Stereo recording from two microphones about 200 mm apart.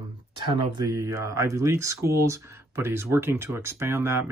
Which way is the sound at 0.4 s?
20° right (ahead or behind).